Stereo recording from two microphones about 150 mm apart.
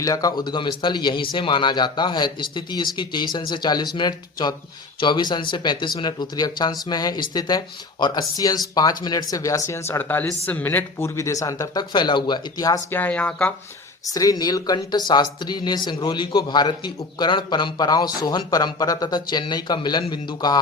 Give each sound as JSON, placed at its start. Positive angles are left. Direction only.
{"t": 0.0, "sound": "speech", "side_deg": 25}
{"t": 12.9, "sound": "speech", "side_deg": 10}
{"t": 14.1, "sound": "speech", "side_deg": 25}